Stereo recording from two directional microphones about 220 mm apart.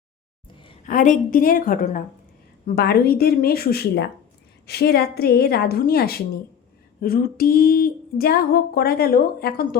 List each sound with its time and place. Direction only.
0.9 s a woman's voice: 35° left (ahead or behind)